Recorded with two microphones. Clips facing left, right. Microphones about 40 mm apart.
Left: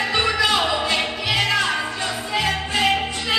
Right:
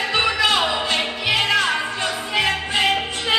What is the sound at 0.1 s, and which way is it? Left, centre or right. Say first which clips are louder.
Music: right 2 dB; centre.